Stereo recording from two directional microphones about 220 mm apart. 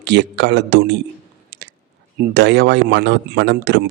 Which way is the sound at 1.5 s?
50° right (ahead or behind).